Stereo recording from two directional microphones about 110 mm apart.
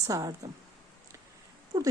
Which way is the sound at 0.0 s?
30° right (ahead or behind).